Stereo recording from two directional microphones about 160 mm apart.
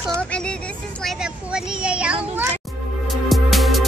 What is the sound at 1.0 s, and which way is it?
Speech, 5° right (ahead or behind).